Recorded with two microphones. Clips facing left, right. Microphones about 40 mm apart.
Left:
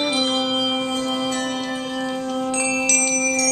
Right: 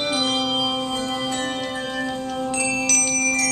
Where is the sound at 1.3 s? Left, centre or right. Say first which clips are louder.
Left 1 dB; centre.